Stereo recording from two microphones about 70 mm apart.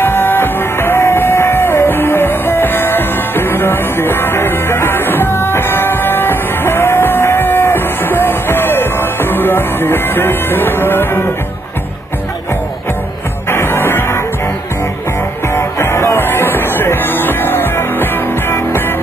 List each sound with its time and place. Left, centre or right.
0.0 s music: left
13.5 s music: left
15.5 s music: left